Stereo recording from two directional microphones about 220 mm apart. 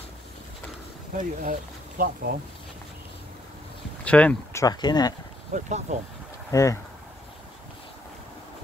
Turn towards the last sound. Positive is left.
turn(degrees=15)  # may be behind; listen again after turning